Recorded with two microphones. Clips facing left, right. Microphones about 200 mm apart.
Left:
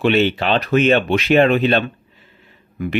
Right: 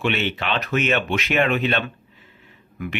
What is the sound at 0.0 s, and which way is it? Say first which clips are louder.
Speech: left 8 dB; 35° left (ahead or behind).